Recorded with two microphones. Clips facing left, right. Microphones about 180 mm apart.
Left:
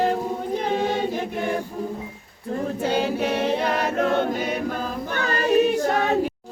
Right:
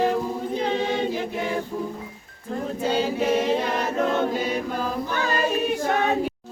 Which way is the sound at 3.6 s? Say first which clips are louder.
Left 2 dB; 60° left (ahead or behind).